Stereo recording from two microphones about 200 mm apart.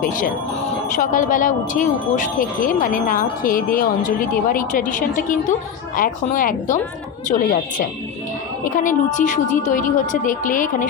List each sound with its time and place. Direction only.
0.9 s speech: 40° left (ahead or behind)